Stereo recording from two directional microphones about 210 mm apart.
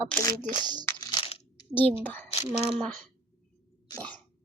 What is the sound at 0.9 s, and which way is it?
Crushing, 20° left (ahead or behind).